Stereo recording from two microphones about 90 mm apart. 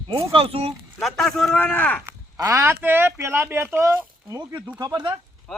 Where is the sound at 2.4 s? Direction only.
25° right (ahead or behind).